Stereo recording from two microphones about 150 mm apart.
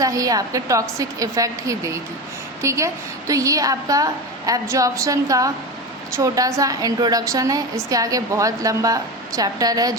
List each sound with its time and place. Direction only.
0.0 s a woman's voice: 25° right (ahead or behind)